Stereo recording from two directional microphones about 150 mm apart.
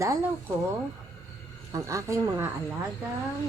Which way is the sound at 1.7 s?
20° right (ahead or behind).